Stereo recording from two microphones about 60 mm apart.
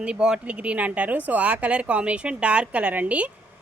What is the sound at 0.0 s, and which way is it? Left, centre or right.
Speech, centre.